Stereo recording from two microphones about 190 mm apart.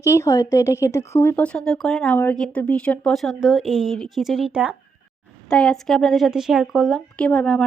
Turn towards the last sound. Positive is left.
turn(degrees=5)  # may be behind; listen again after turning